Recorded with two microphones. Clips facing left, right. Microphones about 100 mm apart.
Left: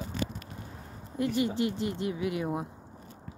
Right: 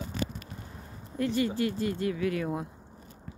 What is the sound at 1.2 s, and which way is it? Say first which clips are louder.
Speech: even; 20° left (ahead or behind).